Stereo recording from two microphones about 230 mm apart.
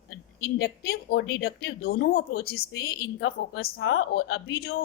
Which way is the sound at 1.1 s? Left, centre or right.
Left.